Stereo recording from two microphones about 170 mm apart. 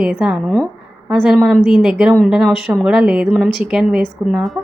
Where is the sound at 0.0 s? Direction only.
5° right (ahead or behind).